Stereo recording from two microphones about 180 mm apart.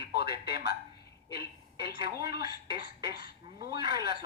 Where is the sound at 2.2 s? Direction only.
60° left (ahead or behind).